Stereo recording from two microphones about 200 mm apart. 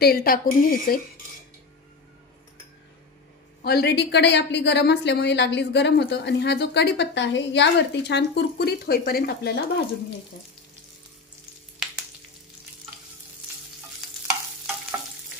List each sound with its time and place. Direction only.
0.0 s speech: 50° left (ahead or behind)
3.6 s a woman's voice: 55° left (ahead or behind)
11.8 s frying: centre (ahead or behind)
14.0 s stir: centre (ahead or behind)